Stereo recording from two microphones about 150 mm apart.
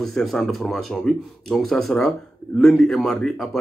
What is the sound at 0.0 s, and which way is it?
A man's voice, centre (ahead or behind).